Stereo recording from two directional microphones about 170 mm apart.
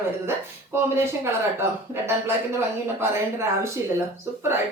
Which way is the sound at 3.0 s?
15° right (ahead or behind).